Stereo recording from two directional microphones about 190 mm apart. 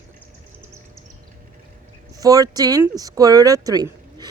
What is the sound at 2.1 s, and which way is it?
Speech, 20° right (ahead or behind).